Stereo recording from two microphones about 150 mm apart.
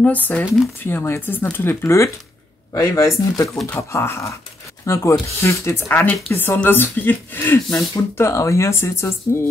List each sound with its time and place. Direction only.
0.0 s speech: 10° left (ahead or behind)